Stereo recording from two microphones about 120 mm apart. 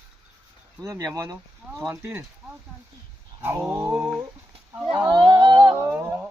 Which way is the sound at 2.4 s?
5° right (ahead or behind).